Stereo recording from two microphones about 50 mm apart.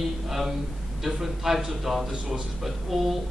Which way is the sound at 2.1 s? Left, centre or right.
Centre.